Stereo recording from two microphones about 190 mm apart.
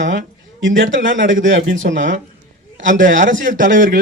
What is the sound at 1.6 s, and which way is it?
Speech, 60° right (ahead or behind).